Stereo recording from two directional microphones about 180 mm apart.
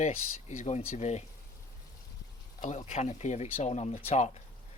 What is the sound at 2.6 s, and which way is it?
Speech, 40° left (ahead or behind).